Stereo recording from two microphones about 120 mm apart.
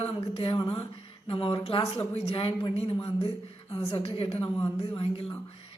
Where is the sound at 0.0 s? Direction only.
50° left (ahead or behind).